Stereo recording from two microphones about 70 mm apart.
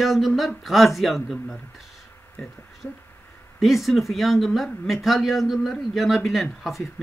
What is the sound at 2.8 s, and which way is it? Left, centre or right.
Speech, left.